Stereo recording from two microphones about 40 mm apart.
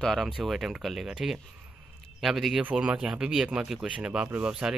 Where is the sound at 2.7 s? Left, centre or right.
Right.